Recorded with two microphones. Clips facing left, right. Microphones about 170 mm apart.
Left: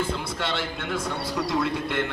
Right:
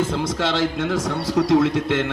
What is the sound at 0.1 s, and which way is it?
A man's voice, 85° right.